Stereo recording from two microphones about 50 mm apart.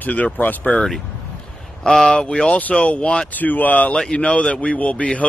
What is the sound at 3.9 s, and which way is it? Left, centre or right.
A man's voice, centre.